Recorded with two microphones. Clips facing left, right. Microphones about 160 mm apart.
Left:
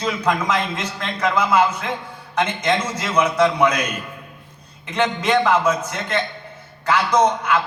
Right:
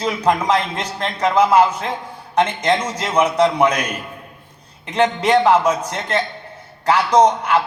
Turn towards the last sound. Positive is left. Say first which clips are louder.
# right 3 dB
turn(degrees=-35)  # may be behind; listen again after turning